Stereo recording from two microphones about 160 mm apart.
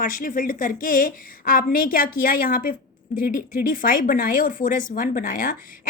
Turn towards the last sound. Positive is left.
turn(degrees=60)  # may be behind; listen again after turning